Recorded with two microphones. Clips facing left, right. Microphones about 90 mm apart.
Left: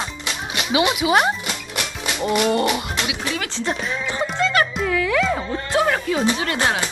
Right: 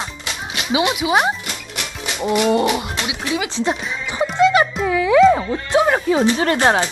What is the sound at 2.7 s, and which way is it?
Speech, 15° right (ahead or behind).